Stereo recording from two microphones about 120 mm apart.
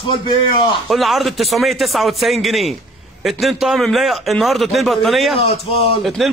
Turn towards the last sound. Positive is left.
turn(degrees=0)  # may be behind; listen again after turning